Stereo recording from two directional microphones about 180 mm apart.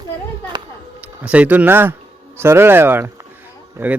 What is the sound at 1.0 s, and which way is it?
Speech, 5° right (ahead or behind).